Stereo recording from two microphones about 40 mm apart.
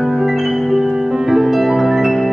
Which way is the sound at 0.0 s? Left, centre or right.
Centre.